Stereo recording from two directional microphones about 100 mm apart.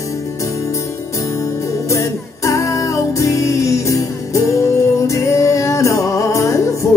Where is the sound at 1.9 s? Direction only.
30° left (ahead or behind).